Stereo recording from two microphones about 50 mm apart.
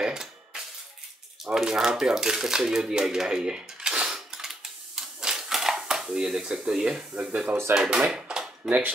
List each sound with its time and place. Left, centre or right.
0.0 s music: centre
1.4 s speech: centre
4.9 s typewriter: centre
7.2 s speech: right
7.7 s speech: centre
8.1 s a sound: centre
8.6 s speech: right